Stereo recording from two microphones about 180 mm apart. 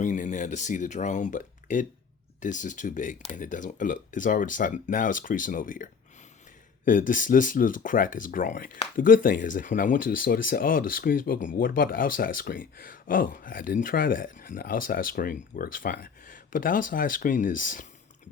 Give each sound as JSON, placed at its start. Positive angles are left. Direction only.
{"t": 0.0, "sound": "speech", "side_deg": 45}